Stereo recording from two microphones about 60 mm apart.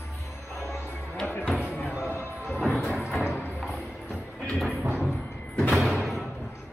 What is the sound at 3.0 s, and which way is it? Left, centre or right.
Music, centre.